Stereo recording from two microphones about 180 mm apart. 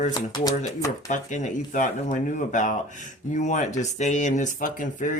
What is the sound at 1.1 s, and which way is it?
Speech, 45° left (ahead or behind).